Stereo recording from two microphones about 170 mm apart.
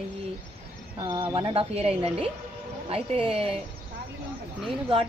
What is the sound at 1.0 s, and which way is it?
Speech, 20° right (ahead or behind).